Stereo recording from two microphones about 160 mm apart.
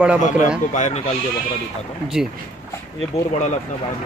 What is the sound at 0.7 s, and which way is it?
Speech, 50° left (ahead or behind).